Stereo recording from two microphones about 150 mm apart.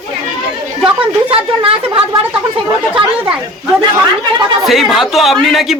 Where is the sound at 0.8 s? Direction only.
35° right (ahead or behind).